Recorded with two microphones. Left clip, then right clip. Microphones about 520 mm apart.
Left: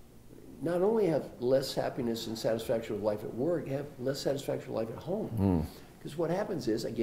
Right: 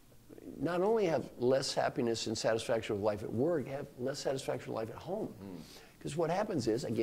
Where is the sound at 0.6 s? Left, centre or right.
Right.